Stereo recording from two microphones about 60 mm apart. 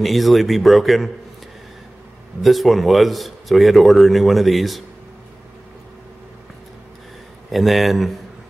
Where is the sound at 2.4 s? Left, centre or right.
Centre.